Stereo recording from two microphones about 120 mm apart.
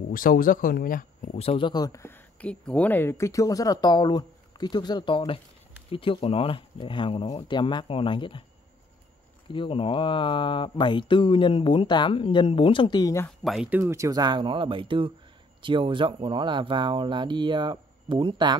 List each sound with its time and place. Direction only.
1.2 s speech: 60° left (ahead or behind)
1.7 s speech: 30° left (ahead or behind)
2.4 s speech: 10° left (ahead or behind); by 8.5 s 45° left (ahead or behind)
9.5 s speech: 45° left (ahead or behind)
13.0 s speech: 25° left (ahead or behind)
13.4 s speech: centre (ahead or behind)
13.7 s speech: 15° right (ahead or behind)
13.9 s speech: 30° right (ahead or behind)